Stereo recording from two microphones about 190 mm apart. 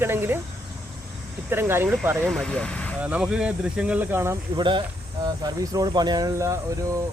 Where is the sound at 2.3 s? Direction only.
5° left (ahead or behind).